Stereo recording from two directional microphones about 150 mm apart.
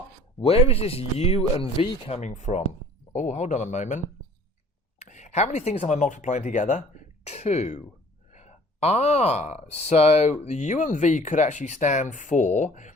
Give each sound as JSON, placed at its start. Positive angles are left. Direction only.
{"t": 0.4, "sound": "speech", "side_deg": 40}